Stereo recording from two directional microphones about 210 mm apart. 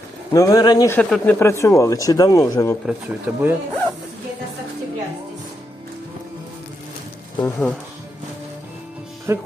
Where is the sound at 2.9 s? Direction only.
10° right (ahead or behind).